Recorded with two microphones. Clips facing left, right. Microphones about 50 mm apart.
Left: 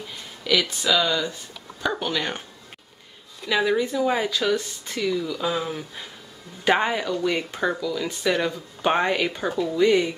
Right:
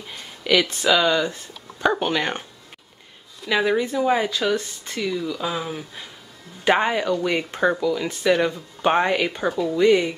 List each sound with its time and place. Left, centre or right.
0.4 s a sound: centre
0.8 s speech: centre
1.3 s speech: right
3.4 s speech: centre
7.1 s speech: centre